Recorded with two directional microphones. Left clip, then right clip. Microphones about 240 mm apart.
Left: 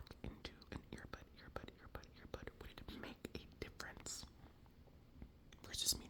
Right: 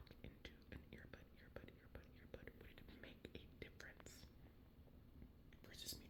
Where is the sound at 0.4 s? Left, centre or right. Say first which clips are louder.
Left 5 dB; left.